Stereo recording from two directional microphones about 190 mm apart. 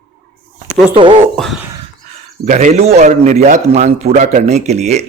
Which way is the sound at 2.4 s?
40° right (ahead or behind).